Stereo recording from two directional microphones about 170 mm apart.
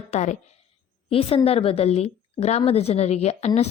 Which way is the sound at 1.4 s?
35° left (ahead or behind).